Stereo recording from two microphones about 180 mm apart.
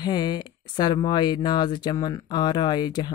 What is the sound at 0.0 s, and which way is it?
Speech, 25° left (ahead or behind).